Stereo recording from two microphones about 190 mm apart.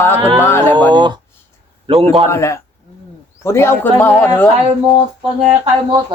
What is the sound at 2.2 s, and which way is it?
A man's voice, 15° left (ahead or behind).